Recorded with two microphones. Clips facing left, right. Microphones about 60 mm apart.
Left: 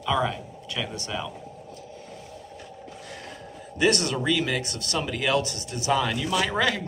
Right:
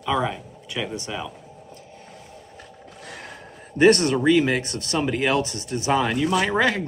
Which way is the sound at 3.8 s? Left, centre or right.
Right.